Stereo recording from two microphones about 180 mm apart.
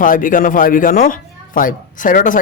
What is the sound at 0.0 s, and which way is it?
Speech, 50° left (ahead or behind).